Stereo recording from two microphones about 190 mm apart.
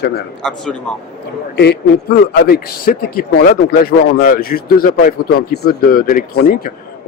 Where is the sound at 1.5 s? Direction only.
60° left (ahead or behind).